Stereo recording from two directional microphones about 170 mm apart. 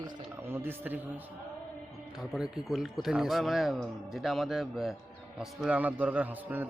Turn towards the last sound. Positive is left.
turn(degrees=-10)  # may be behind; listen again after turning